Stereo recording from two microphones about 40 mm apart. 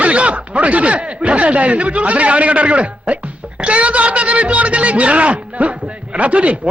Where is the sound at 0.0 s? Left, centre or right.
Right.